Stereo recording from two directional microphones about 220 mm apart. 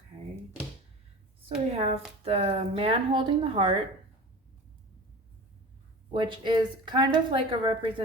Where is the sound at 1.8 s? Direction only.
30° right (ahead or behind).